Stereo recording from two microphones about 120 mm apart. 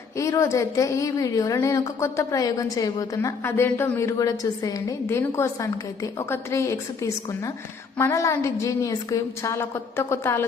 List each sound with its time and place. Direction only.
0.2 s a woman's voice: 25° left (ahead or behind)